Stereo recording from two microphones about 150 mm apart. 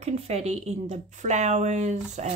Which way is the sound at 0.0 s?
45° right (ahead or behind).